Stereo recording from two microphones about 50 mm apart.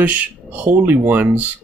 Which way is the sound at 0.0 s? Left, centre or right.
Right.